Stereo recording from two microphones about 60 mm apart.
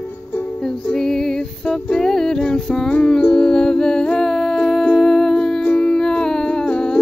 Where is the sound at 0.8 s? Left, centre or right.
Centre.